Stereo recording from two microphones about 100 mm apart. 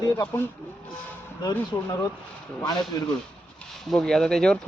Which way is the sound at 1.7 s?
40° left (ahead or behind).